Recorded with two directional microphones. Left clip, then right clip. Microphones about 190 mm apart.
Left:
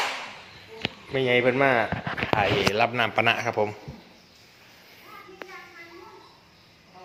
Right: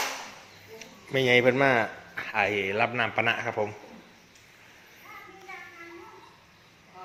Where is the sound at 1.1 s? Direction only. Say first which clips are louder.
Right 1 dB; 30° right (ahead or behind).